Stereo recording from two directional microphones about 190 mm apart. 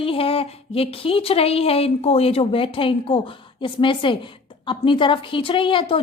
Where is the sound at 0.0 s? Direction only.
30° left (ahead or behind).